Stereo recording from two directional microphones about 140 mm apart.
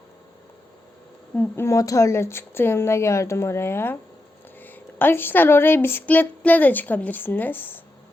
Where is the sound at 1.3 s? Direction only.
15° left (ahead or behind).